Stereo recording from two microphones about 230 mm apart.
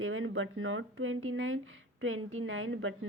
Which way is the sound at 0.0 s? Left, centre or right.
Right.